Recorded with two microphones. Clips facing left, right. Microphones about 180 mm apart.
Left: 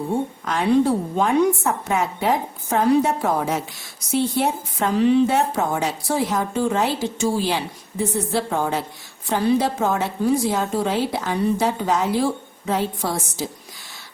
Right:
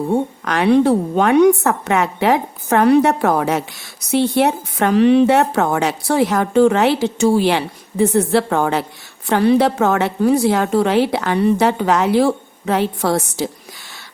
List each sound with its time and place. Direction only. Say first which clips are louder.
0.4 s speech: right 4 dB; 75° right (ahead or behind)